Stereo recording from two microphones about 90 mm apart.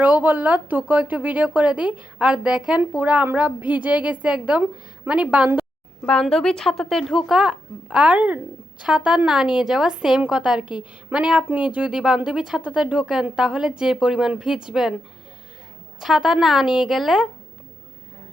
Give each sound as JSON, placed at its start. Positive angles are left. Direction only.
{"t": 0.0, "sound": "a woman's voice", "side_deg": -20}
{"t": 6.2, "sound": "a woman's voice", "side_deg": 5}
{"t": 16.0, "sound": "a woman's voice", "side_deg": -5}